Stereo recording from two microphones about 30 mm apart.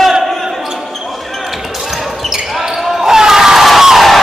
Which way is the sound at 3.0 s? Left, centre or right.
Centre.